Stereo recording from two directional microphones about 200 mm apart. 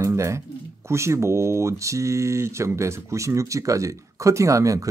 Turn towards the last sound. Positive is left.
turn(degrees=-15)  # may be behind; listen again after turning